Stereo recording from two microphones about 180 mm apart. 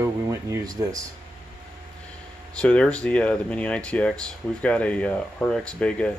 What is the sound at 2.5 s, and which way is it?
Speech, 5° left (ahead or behind).